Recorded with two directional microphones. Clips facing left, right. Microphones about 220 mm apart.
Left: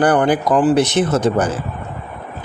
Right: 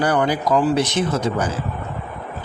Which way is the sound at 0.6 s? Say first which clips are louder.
Left 5 dB; 80° left.